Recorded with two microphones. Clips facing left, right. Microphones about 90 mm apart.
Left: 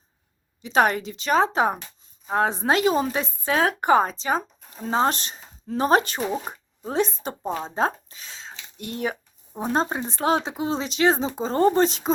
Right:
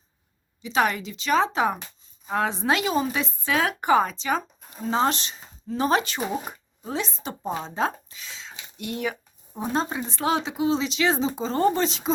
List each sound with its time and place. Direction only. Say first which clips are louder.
0.6 s a woman's voice: left 3 dB; 50° left (ahead or behind)
6.8 s a woman's voice: left 5 dB; 45° left (ahead or behind)